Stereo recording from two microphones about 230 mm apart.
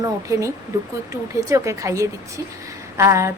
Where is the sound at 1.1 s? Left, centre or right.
Centre.